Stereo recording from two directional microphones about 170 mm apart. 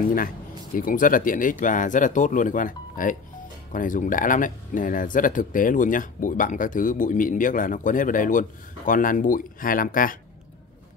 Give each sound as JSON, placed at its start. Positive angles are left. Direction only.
{"t": 0.7, "sound": "speech", "side_deg": 55}